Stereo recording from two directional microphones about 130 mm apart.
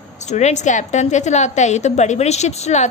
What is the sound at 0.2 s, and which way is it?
A woman's voice, 60° left (ahead or behind).